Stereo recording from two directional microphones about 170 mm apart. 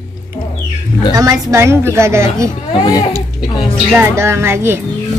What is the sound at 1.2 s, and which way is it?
A woman's voice, 20° right (ahead or behind).